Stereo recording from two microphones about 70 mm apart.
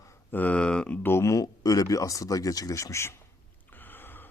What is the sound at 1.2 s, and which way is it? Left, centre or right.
Speech, left.